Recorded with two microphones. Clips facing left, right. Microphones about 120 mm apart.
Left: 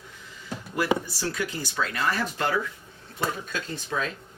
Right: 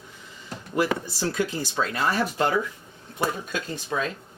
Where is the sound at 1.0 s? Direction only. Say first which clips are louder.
Right 4 dB; 25° right (ahead or behind).